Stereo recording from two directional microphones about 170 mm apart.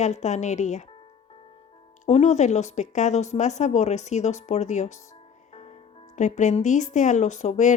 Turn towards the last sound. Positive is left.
turn(degrees=45)  # may be behind; listen again after turning